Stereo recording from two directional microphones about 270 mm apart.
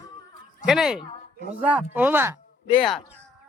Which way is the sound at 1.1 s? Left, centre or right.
Left.